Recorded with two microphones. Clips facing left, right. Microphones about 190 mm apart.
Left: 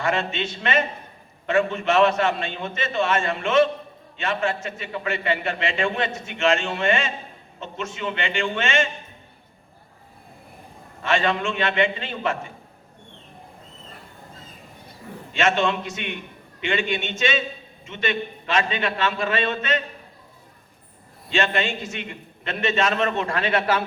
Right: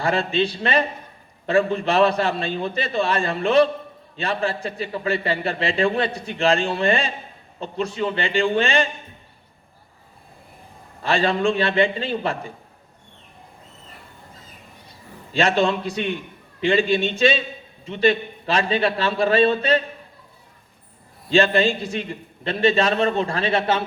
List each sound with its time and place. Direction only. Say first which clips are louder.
0.0 s a man's voice: right 4 dB; 35° right (ahead or behind)
11.0 s a man's voice: right 3 dB; 35° right (ahead or behind)
15.3 s a man's voice: right 2 dB; 35° right (ahead or behind)
21.3 s a man's voice: right 6 dB; 35° right (ahead or behind)